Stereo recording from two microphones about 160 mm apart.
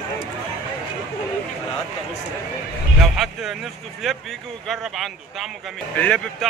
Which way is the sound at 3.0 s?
Centre (ahead or behind).